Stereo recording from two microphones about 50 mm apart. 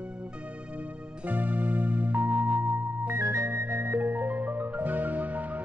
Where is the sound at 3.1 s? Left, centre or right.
Right.